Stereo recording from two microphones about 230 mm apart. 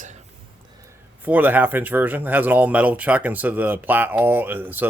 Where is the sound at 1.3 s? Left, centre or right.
Centre.